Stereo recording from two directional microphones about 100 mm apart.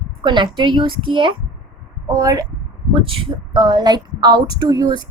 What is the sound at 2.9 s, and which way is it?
A woman's voice, 60° right (ahead or behind).